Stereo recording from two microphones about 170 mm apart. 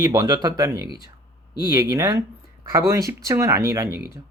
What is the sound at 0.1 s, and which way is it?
Speech, 20° right (ahead or behind).